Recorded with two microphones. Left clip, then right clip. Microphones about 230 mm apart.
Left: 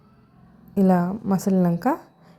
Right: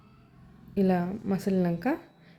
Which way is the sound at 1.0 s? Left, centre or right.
Centre.